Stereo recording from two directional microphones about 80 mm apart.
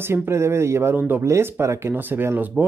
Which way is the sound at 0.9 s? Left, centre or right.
Right.